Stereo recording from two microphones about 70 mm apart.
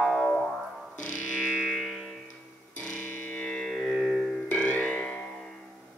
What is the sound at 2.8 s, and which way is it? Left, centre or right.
Music, centre.